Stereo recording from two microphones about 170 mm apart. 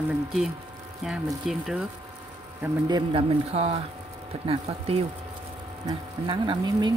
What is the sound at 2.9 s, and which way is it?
Speech, 30° right (ahead or behind).